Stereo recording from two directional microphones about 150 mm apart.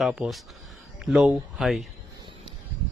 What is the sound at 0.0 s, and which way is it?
Speech, centre (ahead or behind).